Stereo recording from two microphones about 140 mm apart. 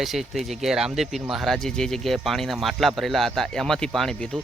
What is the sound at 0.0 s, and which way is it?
Speech, centre (ahead or behind).